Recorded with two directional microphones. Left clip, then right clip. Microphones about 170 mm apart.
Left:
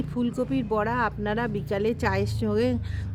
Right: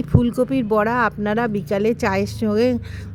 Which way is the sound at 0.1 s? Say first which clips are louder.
Right 9 dB; 35° right (ahead or behind).